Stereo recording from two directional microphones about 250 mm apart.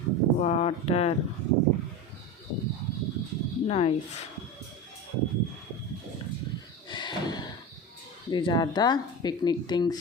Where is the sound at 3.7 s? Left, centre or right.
Left.